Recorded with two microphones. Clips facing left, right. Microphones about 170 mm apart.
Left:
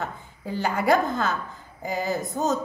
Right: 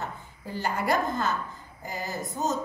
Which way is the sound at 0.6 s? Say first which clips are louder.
Left 5 dB; 90° left.